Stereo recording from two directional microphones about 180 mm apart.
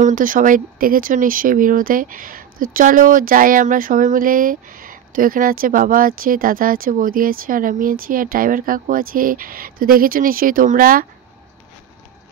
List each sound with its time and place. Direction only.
0.0 s speech: 50° right (ahead or behind)